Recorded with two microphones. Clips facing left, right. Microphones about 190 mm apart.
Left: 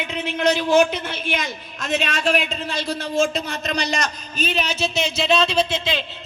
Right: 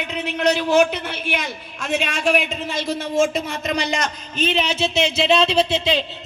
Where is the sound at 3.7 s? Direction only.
25° right (ahead or behind).